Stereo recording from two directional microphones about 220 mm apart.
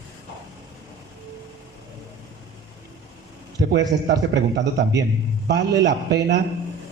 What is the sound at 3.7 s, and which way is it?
A man's voice, 50° right (ahead or behind).